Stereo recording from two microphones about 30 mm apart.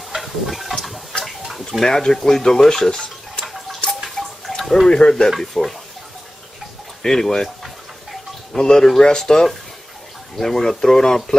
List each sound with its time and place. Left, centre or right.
0.1 s a sound: centre
1.7 s speech: centre
2.9 s stir: left
4.5 s drip: centre
4.8 s speech: left
5.5 s speech: centre
7.0 s speech: centre
8.5 s speech: left